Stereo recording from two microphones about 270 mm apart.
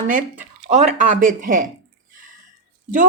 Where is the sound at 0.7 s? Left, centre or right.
Right.